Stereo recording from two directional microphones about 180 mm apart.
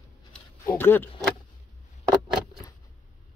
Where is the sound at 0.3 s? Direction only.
10° left (ahead or behind).